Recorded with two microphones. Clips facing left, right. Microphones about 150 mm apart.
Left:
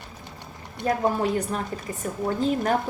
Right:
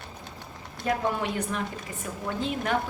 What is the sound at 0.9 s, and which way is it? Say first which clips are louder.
A woman's voice: left 4 dB; 40° left (ahead or behind).